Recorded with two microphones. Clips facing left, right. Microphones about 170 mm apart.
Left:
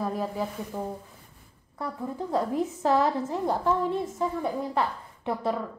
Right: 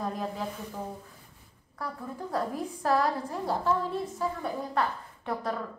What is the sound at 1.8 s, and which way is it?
A woman's voice, 25° left (ahead or behind).